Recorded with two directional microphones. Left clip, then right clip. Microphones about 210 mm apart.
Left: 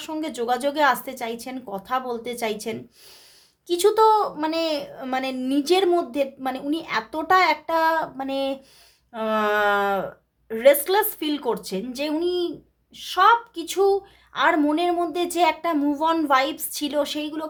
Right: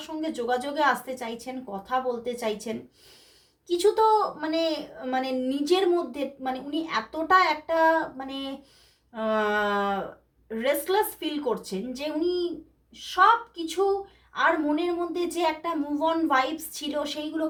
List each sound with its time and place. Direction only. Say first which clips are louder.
0.0 s a woman's voice: left 3 dB; 45° left (ahead or behind)